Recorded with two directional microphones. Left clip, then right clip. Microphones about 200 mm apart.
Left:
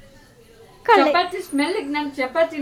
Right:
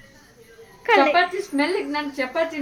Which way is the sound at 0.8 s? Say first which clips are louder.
Left 2 dB; 20° left (ahead or behind).